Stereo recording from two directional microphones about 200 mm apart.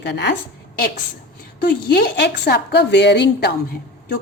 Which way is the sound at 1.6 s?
55° left (ahead or behind).